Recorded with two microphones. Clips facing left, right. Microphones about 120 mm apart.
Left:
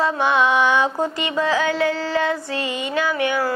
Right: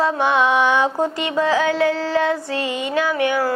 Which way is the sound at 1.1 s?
50° right (ahead or behind).